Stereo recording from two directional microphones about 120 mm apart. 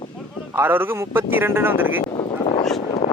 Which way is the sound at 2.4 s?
60° left (ahead or behind).